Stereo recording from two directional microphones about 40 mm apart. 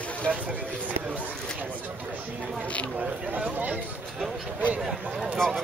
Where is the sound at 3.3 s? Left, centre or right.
Right.